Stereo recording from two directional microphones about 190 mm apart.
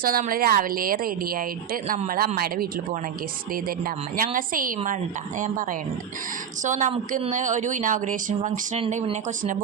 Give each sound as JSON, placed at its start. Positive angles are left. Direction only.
{"t": 0.0, "sound": "speech", "side_deg": -50}